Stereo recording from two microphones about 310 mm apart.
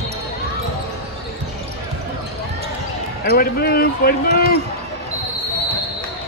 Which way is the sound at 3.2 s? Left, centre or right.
Left.